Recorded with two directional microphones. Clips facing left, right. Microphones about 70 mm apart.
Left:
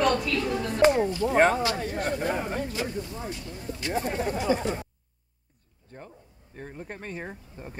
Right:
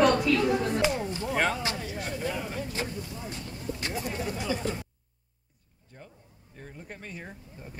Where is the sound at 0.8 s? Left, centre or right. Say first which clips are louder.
Left 7 dB; left.